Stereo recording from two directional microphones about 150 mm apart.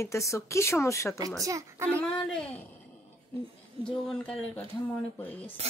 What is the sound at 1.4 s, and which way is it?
Speech, 20° right (ahead or behind).